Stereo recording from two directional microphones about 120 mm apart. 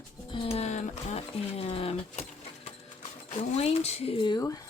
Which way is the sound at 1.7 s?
55° left (ahead or behind).